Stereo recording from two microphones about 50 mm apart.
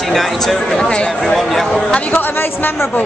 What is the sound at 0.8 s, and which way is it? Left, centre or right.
Speech, centre.